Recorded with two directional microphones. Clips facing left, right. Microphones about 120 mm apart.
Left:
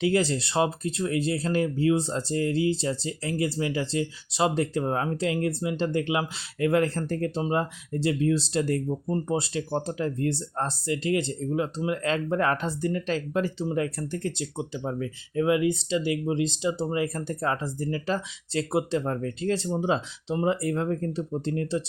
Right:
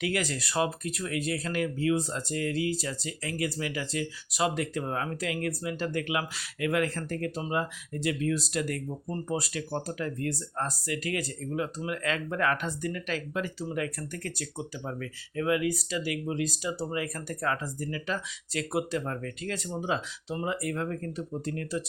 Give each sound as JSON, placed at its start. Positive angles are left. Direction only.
{"t": 0.0, "sound": "speech", "side_deg": 30}